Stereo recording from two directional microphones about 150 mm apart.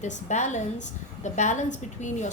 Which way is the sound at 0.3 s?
55° left (ahead or behind).